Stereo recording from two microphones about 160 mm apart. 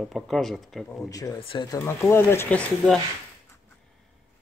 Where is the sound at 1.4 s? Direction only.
30° left (ahead or behind).